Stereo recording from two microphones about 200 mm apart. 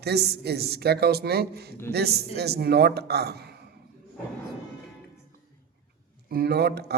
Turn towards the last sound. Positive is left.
turn(degrees=-55)  # may be behind; listen again after turning